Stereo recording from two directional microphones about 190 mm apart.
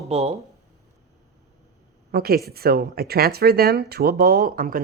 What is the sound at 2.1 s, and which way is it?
A woman's voice, 55° right (ahead or behind).